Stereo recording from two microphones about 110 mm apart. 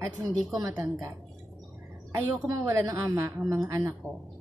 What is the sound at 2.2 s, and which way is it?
A woman's voice, 30° right (ahead or behind).